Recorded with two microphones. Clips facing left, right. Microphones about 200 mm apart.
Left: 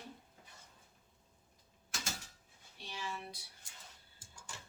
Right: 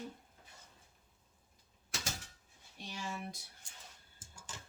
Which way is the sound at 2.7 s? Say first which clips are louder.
Right 1 dB; 45° right (ahead or behind).